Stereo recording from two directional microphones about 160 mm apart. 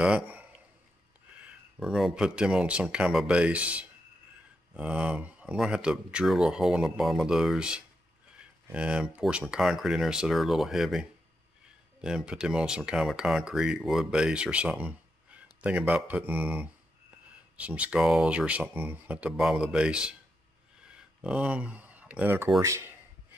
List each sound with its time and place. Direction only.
0.0 s a man's voice: 10° right (ahead or behind)
20.8 s a sound: 5° right (ahead or behind)
22.6 s a man's voice: 20° right (ahead or behind)